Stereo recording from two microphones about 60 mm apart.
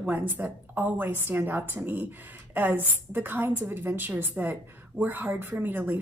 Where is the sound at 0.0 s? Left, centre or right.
Right.